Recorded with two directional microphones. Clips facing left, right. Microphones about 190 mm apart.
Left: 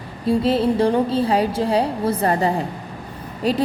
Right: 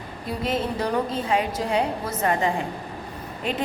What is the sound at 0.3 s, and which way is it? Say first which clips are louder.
A woman's voice: left 9 dB; 30° left (ahead or behind).